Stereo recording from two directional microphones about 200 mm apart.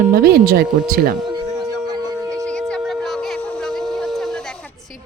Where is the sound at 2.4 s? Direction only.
5° left (ahead or behind).